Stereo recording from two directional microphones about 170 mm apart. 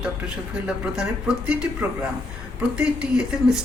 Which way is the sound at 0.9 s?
5° right (ahead or behind).